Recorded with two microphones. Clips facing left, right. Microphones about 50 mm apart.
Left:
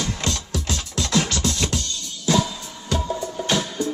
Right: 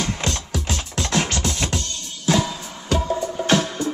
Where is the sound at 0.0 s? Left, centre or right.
Right.